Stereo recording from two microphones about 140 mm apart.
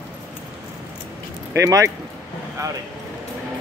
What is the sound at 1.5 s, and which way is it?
Speech, 20° right (ahead or behind).